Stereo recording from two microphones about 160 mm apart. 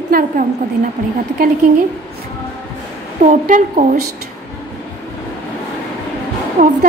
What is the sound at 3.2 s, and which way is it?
Speech, 55° right (ahead or behind).